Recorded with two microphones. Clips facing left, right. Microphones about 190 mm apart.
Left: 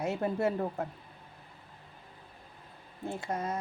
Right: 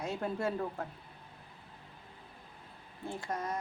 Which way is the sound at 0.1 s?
25° left (ahead or behind).